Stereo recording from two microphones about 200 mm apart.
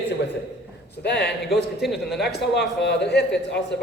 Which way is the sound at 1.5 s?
Centre (ahead or behind).